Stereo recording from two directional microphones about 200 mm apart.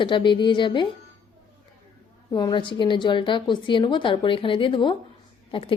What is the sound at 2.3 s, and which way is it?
A woman's voice, 20° left (ahead or behind).